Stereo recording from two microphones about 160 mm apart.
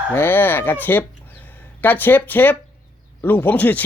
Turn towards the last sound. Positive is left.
turn(degrees=10)  # may be behind; listen again after turning